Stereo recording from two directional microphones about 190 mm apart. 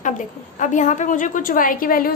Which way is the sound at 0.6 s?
40° left (ahead or behind).